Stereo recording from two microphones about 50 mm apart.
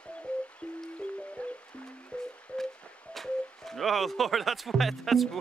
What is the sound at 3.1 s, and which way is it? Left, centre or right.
Speech, centre.